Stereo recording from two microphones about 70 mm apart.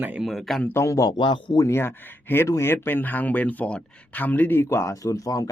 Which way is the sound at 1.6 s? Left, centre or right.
Left.